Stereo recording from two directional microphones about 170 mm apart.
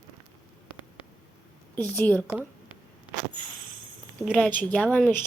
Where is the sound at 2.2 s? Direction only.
15° right (ahead or behind).